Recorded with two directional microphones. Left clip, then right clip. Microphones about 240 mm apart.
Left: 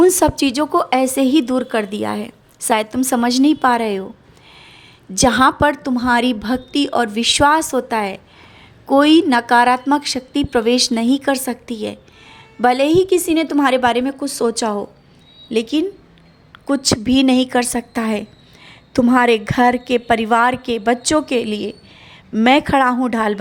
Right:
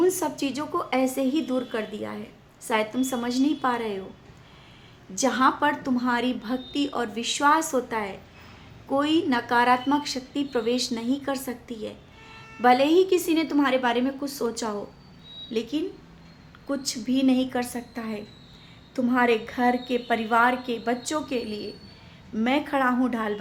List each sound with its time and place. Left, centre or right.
0.0 s a woman's voice: left
5.1 s a woman's voice: left